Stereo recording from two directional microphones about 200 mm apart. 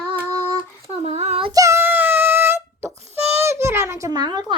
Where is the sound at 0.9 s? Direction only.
30° right (ahead or behind).